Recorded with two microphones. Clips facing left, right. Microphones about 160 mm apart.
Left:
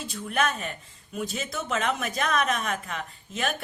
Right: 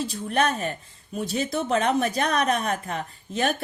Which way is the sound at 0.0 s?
35° right (ahead or behind).